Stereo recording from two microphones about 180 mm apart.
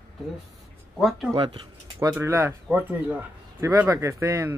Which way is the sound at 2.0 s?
15° right (ahead or behind).